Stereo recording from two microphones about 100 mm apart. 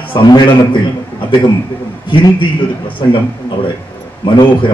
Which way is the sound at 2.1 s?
60° left (ahead or behind).